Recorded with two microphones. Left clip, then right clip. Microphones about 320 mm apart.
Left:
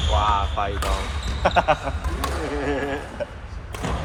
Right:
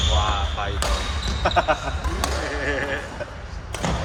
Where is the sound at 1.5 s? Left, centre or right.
Left.